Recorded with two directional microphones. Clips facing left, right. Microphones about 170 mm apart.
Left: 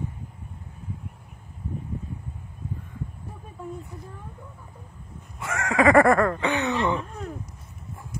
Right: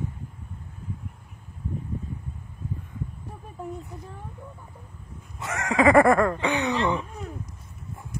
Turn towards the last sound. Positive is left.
turn(degrees=-15)  # may be behind; listen again after turning